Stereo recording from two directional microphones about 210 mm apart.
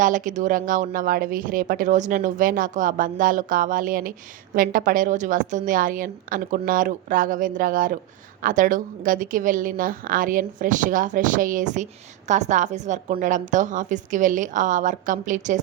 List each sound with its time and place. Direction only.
0.0 s speech: 35° right (ahead or behind)